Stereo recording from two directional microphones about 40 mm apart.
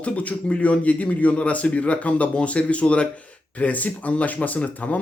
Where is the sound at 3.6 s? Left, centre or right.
Left.